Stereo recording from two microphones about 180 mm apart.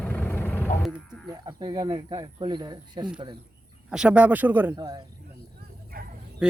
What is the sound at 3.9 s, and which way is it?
Speech, 5° right (ahead or behind).